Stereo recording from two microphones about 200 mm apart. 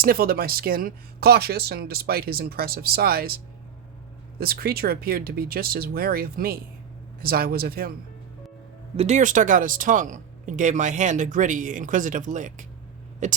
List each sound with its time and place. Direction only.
0.0 s speech: 50° right (ahead or behind)
9.0 s speech: 35° right (ahead or behind)